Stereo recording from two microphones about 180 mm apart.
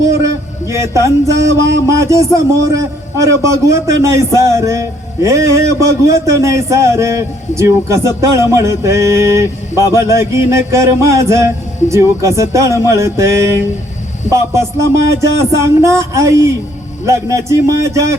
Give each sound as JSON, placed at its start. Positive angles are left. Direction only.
{"t": 0.7, "sound": "a man's voice", "side_deg": -15}